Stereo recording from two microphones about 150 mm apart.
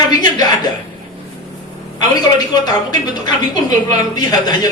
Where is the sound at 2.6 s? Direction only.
25° left (ahead or behind).